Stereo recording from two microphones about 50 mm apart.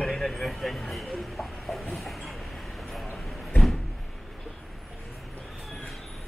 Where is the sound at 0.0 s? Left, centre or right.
Centre.